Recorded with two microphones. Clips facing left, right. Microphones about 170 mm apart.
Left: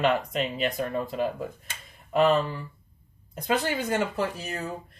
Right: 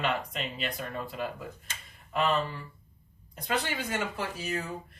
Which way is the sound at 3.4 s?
45° left (ahead or behind).